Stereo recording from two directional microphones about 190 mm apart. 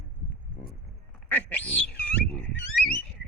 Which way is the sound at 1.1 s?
10° left (ahead or behind).